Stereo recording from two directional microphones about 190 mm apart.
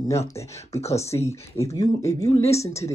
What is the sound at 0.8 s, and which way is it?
Speech, 35° left (ahead or behind).